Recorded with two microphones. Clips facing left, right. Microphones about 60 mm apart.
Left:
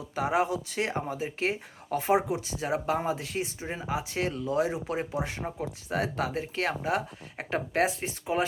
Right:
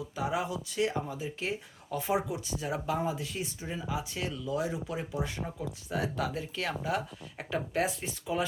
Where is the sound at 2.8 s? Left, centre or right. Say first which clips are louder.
Left 3 dB; left.